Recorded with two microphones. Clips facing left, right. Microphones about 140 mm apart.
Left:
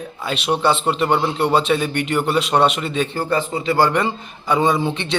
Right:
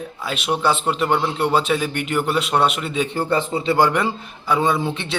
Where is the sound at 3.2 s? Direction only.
25° right (ahead or behind).